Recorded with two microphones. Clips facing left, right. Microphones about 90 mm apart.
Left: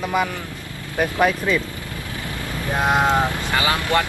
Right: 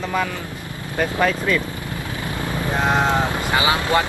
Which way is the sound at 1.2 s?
10° left (ahead or behind).